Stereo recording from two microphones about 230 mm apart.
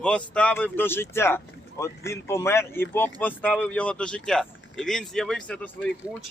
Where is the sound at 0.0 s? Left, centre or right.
Centre.